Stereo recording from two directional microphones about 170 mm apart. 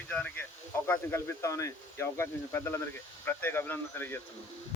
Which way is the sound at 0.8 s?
15° left (ahead or behind).